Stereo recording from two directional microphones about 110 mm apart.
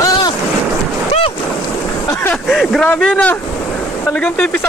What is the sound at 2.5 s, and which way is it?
Speech, centre (ahead or behind).